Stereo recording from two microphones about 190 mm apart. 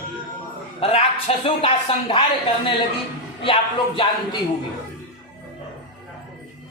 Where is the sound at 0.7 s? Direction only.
30° left (ahead or behind).